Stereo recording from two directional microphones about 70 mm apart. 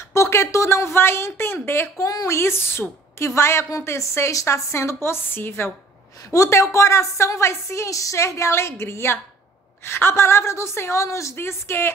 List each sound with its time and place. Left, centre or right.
0.1 s a woman's voice: left
2.0 s a woman's voice: left
2.3 s a woman's voice: left
6.3 s a woman's voice: left